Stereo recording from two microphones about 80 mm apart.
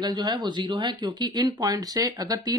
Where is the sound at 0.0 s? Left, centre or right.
Right.